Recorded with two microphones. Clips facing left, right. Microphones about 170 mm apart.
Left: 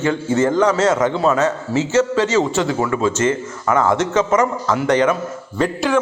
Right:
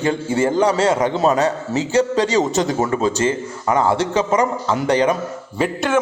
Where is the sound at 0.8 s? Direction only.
30° right (ahead or behind).